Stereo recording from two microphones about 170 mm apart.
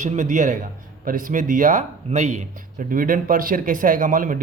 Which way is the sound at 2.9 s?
55° right (ahead or behind).